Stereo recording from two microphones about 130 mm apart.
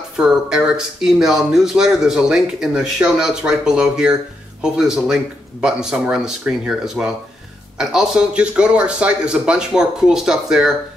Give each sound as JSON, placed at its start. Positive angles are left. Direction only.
{"t": 0.2, "sound": "speech", "side_deg": -5}